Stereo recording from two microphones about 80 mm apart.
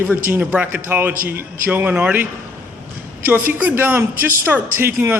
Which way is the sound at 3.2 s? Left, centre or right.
Right.